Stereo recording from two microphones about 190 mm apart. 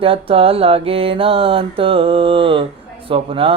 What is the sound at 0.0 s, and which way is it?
Mantra, 30° right (ahead or behind).